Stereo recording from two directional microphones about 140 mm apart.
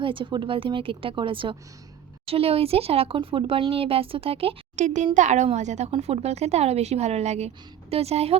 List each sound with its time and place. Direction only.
0.0 s speech: 35° right (ahead or behind)
4.8 s a child's voice: 60° right (ahead or behind)